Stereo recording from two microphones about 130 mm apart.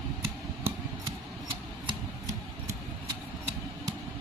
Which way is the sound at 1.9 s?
25° right (ahead or behind).